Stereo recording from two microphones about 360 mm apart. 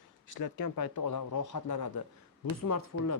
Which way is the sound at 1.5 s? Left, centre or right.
Left.